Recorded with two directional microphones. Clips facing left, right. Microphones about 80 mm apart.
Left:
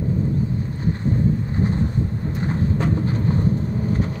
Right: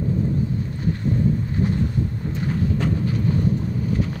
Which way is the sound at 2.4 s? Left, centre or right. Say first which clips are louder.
Left 1 dB; left.